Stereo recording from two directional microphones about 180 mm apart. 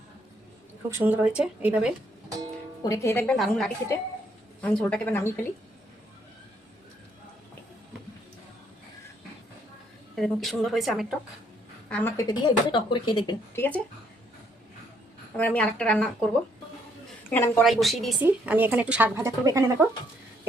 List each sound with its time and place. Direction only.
0.9 s a woman's voice: 10° right (ahead or behind)
2.8 s a woman's voice: 15° left (ahead or behind)
3.3 s a woman's voice: centre (ahead or behind)
10.2 s a woman's voice: centre (ahead or behind)
12.1 s speech: 25° left (ahead or behind)
13.6 s a woman's voice: 10° left (ahead or behind)
15.4 s a woman's voice: 10° left (ahead or behind)
17.3 s a woman's voice: 15° left (ahead or behind)
17.6 s a woman's voice: centre (ahead or behind); by 19.9 s 20° right (ahead or behind)